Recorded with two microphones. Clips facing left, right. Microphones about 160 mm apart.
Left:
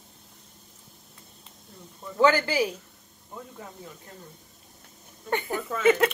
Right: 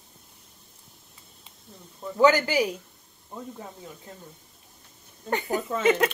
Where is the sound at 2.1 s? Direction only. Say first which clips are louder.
Right 2 dB; 15° right (ahead or behind).